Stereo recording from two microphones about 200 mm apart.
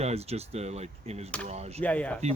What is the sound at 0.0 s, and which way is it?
Speech, 30° right (ahead or behind).